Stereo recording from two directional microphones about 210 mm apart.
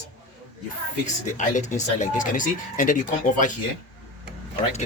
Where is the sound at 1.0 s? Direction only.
35° left (ahead or behind).